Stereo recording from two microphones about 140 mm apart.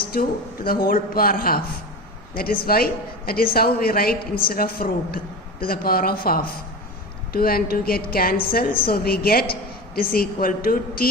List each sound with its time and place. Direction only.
0.0 s a woman's voice: 90° left